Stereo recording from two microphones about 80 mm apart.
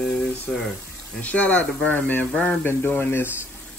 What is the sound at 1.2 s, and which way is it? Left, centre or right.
Speech, centre.